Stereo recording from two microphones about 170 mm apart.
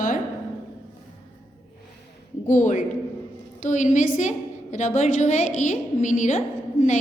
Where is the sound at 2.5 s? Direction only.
45° left (ahead or behind).